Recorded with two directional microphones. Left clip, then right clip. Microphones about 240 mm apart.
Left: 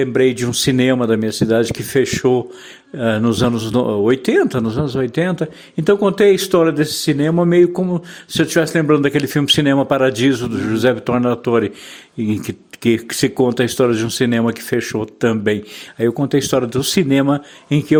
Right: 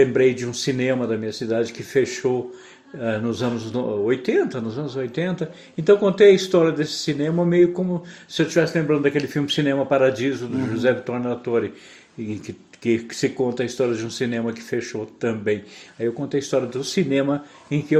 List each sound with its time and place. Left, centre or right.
0.0 s a man's voice: left